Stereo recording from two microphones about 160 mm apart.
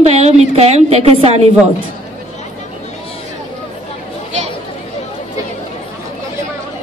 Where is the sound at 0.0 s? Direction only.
40° right (ahead or behind).